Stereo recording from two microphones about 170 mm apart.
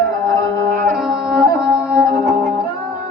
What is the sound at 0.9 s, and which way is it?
Music, centre (ahead or behind).